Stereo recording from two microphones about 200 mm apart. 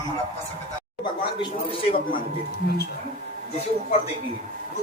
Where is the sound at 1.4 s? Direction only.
25° left (ahead or behind).